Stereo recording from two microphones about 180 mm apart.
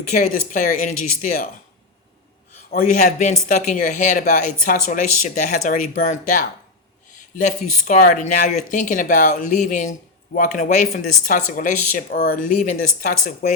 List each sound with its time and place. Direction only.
0.2 s speech: 45° left (ahead or behind)
3.2 s speech: 40° left (ahead or behind)
13.4 s speech: 60° left (ahead or behind)